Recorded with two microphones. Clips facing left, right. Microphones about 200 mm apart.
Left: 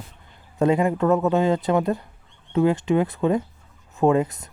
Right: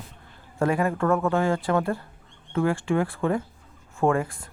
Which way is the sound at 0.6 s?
20° left (ahead or behind).